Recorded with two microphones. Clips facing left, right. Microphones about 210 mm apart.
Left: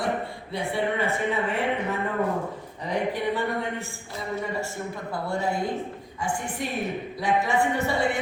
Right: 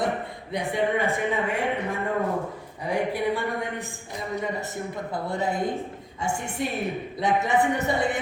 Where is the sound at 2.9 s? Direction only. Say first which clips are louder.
Right 1 dB; 15° right (ahead or behind).